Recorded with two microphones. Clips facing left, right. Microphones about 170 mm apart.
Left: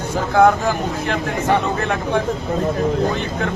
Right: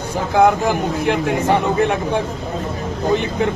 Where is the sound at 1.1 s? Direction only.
15° right (ahead or behind).